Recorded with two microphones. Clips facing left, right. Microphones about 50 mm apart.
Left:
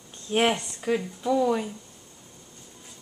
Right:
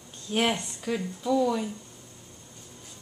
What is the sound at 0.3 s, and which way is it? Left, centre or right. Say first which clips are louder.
Speech: left 3 dB; left.